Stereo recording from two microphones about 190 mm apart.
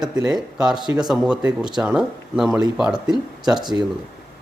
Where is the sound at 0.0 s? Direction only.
5° right (ahead or behind).